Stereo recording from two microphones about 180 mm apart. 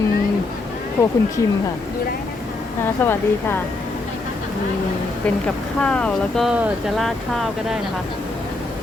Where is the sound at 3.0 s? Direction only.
10° left (ahead or behind).